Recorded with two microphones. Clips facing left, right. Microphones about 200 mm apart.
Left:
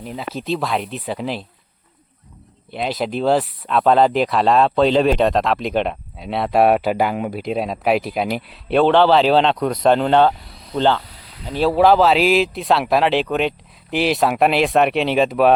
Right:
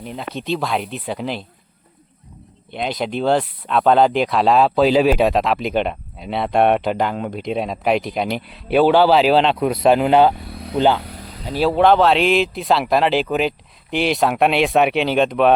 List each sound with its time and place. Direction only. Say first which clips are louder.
0.0 s speech: even; centre (ahead or behind)
2.7 s speech: left 1 dB; centre (ahead or behind)
10.5 s vehicle: right 8 dB; 60° right (ahead or behind)
10.8 s speech: right 1 dB; 10° right (ahead or behind)
11.0 s a sound: right 8 dB; 50° right (ahead or behind)
11.5 s speech: even; centre (ahead or behind)